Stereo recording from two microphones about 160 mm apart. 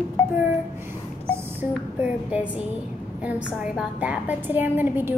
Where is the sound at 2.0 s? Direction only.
10° right (ahead or behind).